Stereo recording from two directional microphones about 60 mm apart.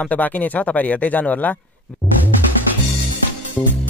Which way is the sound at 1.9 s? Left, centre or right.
Centre.